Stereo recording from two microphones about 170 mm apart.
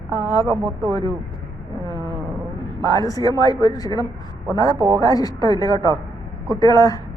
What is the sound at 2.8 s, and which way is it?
Speech, 20° left (ahead or behind).